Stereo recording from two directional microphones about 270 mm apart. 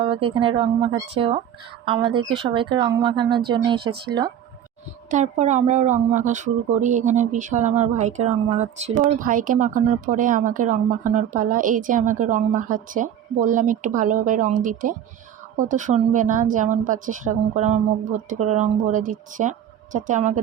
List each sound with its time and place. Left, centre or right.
0.0 s speech: centre